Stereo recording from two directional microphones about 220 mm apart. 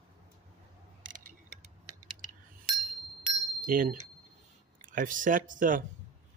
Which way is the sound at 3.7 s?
40° right (ahead or behind).